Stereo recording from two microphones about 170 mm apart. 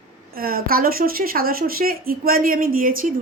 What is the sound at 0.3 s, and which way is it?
A woman's voice, 60° right (ahead or behind).